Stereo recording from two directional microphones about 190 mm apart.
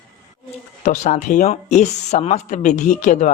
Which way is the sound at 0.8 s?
40° left (ahead or behind).